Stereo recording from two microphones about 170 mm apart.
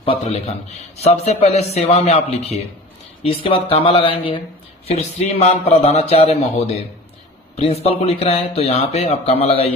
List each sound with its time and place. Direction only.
0.0 s a man's voice: 35° left (ahead or behind)